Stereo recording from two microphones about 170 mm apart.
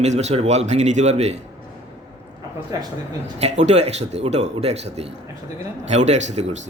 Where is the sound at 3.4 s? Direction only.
40° right (ahead or behind).